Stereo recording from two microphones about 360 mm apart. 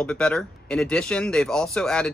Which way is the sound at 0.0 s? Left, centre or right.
Centre.